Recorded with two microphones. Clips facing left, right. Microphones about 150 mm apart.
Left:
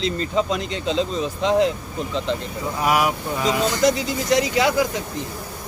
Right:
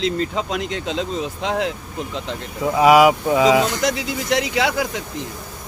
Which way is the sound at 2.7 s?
90° right.